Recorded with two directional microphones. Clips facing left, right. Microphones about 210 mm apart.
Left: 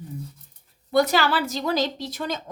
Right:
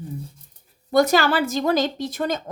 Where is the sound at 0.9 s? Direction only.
45° right (ahead or behind).